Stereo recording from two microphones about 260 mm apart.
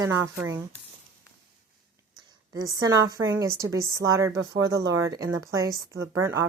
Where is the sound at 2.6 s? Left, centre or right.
Centre.